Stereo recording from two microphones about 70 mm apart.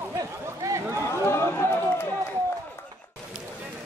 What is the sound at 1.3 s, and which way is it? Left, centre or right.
Run, left.